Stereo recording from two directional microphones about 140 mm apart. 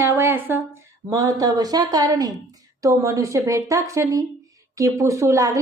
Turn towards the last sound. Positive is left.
turn(degrees=-25)  # may be behind; listen again after turning